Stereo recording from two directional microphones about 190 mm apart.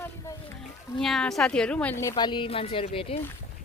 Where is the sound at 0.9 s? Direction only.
Centre (ahead or behind); by 3.1 s 30° left (ahead or behind).